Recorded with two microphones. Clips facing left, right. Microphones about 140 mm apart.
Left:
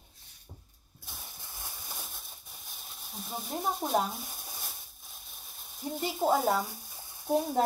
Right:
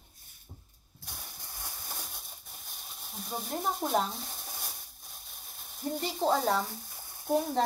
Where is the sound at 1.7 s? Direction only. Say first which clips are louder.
Right 1 dB; 5° left (ahead or behind).